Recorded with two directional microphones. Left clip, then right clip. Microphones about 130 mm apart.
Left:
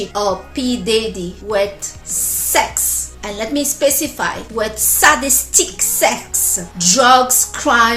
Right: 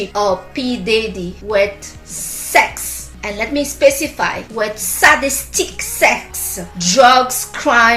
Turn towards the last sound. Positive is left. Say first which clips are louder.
# right 2 dB
turn(degrees=45)  # may be behind; listen again after turning